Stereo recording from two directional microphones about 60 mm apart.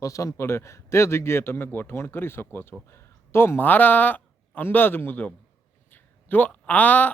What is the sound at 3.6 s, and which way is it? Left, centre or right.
Speech, left.